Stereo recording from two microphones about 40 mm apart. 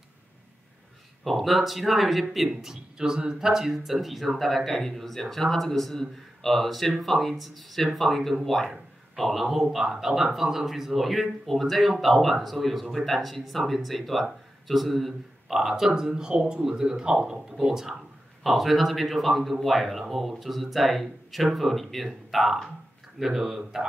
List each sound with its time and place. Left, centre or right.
1.2 s a man's voice: centre
15.5 s speech: centre